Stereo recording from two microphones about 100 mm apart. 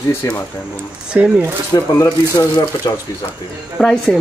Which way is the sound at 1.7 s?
45° left (ahead or behind).